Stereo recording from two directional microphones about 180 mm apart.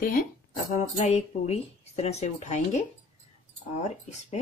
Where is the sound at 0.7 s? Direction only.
40° left (ahead or behind).